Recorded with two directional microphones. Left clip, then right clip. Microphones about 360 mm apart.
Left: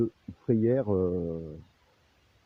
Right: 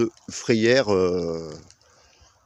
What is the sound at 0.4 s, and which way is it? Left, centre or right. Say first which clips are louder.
Speech: right 8 dB; left.